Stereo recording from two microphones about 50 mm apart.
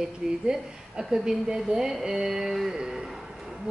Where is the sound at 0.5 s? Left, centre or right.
Centre.